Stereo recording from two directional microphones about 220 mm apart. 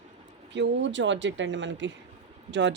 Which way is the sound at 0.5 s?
55° right (ahead or behind).